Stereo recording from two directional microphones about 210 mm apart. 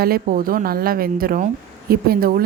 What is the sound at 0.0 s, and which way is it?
A woman's voice, 45° right (ahead or behind).